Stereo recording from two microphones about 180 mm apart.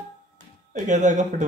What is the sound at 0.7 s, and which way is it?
Speech, 45° right (ahead or behind).